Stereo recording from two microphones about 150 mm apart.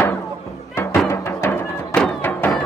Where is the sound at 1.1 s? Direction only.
15° left (ahead or behind).